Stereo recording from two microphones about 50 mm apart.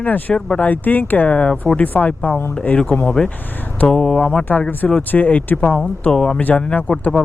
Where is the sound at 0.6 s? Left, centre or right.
Left.